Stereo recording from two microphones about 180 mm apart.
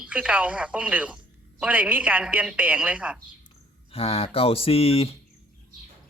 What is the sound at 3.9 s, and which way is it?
Speech, 35° left (ahead or behind).